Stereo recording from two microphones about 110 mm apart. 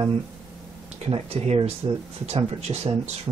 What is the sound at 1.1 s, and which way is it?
Speech, 65° right (ahead or behind).